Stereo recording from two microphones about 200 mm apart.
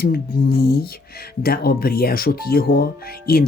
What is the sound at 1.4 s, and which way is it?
Speech, 50° left (ahead or behind).